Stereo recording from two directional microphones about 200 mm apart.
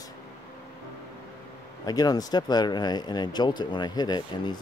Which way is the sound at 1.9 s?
20° left (ahead or behind).